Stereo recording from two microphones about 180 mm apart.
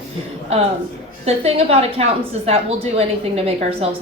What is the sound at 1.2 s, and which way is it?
Speech, 35° right (ahead or behind).